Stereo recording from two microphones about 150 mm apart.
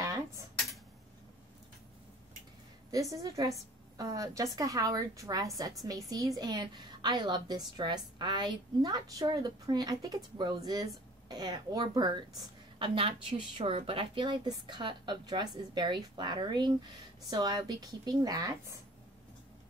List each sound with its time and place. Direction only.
2.9 s a woman's voice: 20° right (ahead or behind)